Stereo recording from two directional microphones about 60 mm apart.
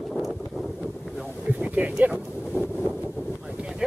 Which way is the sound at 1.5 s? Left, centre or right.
Right.